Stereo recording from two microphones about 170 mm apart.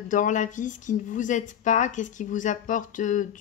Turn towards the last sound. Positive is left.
turn(degrees=50)  # may be behind; listen again after turning